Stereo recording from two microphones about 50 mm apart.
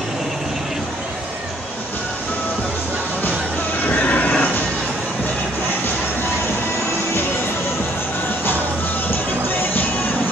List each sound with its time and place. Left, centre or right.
3.8 s vehicle: left